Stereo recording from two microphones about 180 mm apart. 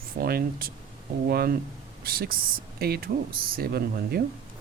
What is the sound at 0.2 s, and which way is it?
Speech, 55° right (ahead or behind).